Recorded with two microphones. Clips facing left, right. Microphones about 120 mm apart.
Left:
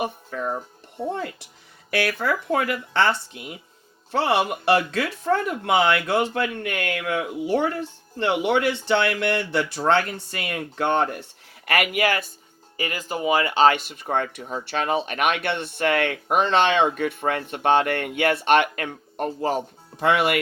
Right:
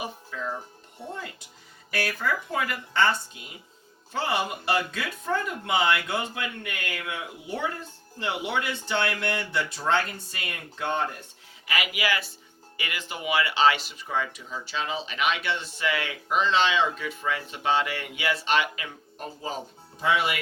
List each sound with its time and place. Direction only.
0.0 s speech: 55° left (ahead or behind)